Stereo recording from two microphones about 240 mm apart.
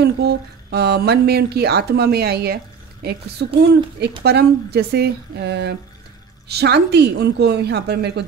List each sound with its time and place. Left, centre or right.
0.0 s a woman's voice: right